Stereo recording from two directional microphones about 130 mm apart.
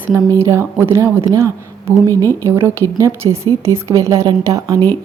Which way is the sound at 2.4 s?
20° right (ahead or behind).